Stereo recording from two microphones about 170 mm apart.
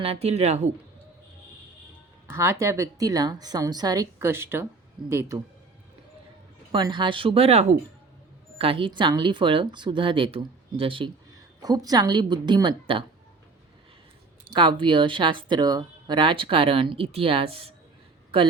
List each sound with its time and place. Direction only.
0.0 s speech: 35° right (ahead or behind)
2.3 s speech: 15° right (ahead or behind)
6.7 s speech: 25° right (ahead or behind)
14.5 s speech: 25° right (ahead or behind)